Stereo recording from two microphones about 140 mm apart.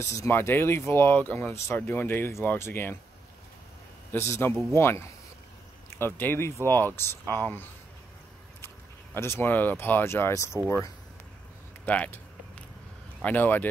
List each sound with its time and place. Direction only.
0.0 s speech: 20° left (ahead or behind)
4.1 s speech: 15° left (ahead or behind)
9.1 s speech: 15° left (ahead or behind)
11.8 s speech: 10° left (ahead or behind)
13.2 s speech: 10° left (ahead or behind)